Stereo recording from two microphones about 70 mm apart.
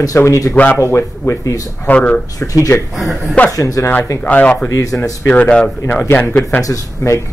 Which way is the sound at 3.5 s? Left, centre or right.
Left.